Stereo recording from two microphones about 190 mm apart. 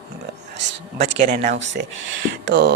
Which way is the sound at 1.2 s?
40° right (ahead or behind).